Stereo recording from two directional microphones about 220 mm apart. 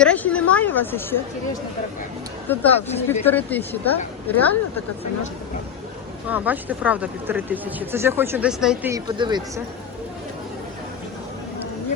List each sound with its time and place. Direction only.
0.0 s a sound: 5° left (ahead or behind)
2.5 s a woman's voice: 10° left (ahead or behind)
6.2 s speech: 5° right (ahead or behind)
8.9 s speech: 15° right (ahead or behind)